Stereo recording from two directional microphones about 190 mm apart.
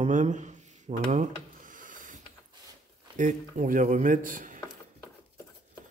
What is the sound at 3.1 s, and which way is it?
Speech, 40° right (ahead or behind).